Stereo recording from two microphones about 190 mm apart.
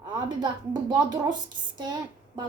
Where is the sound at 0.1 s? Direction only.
25° right (ahead or behind).